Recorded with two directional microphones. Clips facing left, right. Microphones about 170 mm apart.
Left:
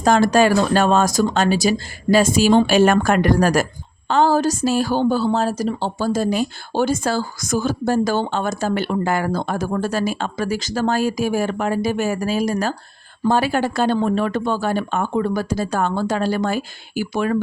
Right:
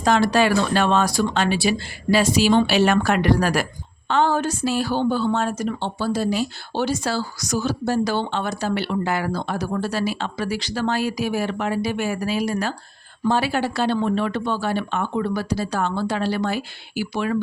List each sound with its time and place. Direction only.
0.0 s a woman's voice: 45° left (ahead or behind)